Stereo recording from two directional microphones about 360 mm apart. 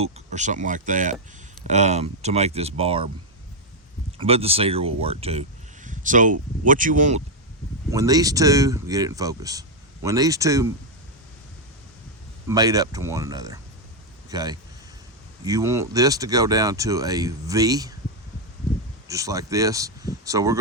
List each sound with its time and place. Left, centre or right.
0.0 s speech: centre
4.2 s speech: centre
7.9 s speech: centre
12.5 s speech: centre
19.0 s speech: centre